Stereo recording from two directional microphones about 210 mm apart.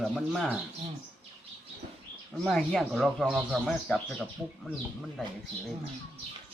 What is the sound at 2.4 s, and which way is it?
Speech, centre (ahead or behind).